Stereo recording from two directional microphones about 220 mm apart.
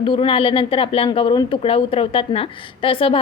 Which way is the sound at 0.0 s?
25° left (ahead or behind).